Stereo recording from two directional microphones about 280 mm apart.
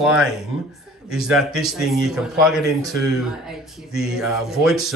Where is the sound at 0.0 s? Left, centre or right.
Centre.